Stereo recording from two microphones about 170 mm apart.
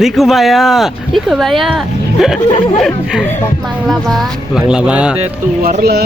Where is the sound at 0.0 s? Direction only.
Centre (ahead or behind).